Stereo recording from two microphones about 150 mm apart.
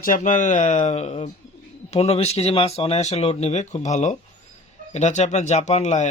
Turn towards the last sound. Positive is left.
turn(degrees=50)  # may be behind; listen again after turning